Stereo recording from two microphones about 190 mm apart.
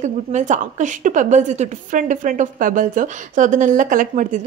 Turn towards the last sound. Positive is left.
turn(degrees=-45)  # may be behind; listen again after turning